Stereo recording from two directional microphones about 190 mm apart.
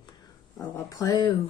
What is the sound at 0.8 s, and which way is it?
Speech, 20° left (ahead or behind).